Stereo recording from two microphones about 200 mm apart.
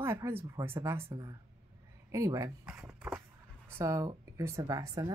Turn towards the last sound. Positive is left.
turn(degrees=-20)  # may be behind; listen again after turning